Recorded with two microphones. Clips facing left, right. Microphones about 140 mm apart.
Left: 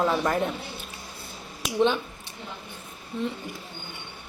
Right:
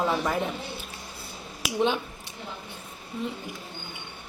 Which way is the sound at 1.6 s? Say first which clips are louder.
Left 2 dB; 10° right (ahead or behind).